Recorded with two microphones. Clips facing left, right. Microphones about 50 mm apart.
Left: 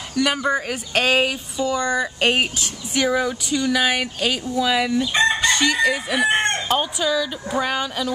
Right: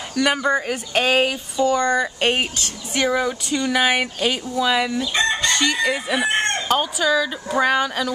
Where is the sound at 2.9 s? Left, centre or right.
Centre.